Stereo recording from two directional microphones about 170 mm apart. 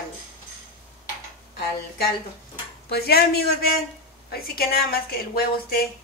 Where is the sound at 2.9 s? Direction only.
65° left (ahead or behind).